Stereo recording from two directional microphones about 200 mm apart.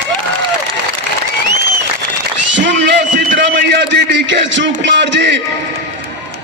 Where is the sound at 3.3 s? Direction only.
60° right (ahead or behind).